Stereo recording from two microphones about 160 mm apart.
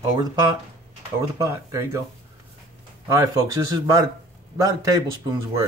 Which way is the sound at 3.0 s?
20° right (ahead or behind).